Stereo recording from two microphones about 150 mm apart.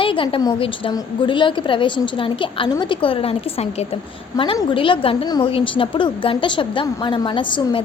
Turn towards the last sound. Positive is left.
turn(degrees=35)  # may be behind; listen again after turning